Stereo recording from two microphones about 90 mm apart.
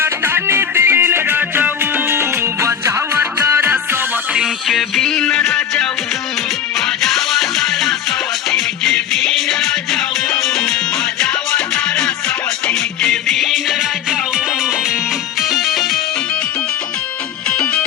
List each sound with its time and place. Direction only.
0.0 s music: 25° right (ahead or behind)
4.7 s music: centre (ahead or behind)
17.5 s music: 10° left (ahead or behind)